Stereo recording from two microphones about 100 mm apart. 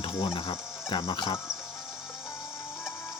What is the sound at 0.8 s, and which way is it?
Speech, 45° left (ahead or behind).